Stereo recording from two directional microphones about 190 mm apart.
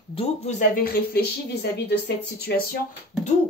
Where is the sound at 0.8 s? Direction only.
55° left (ahead or behind).